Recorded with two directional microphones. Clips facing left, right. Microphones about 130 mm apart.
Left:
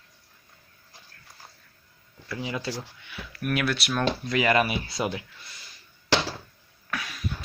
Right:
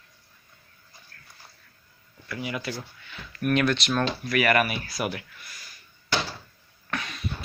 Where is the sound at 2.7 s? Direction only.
15° left (ahead or behind).